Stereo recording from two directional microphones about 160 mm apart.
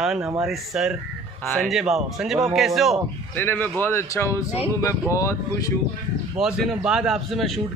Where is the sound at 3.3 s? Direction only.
10° left (ahead or behind).